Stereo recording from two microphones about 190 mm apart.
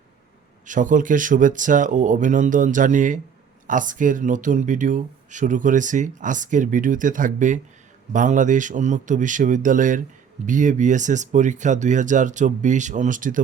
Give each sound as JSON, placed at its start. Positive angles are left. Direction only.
{"t": 0.6, "sound": "speech", "side_deg": -40}